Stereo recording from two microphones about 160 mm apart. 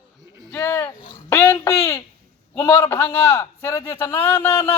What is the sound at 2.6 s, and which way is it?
A man's voice, 15° left (ahead or behind).